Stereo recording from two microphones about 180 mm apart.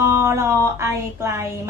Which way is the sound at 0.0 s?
15° right (ahead or behind).